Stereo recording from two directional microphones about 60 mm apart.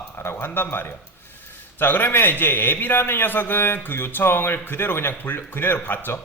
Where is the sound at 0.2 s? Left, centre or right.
Left.